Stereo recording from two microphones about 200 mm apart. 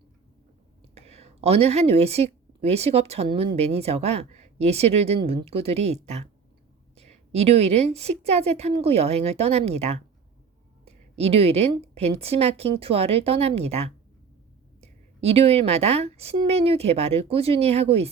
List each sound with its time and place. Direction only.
0.9 s a woman's voice: 30° right (ahead or behind)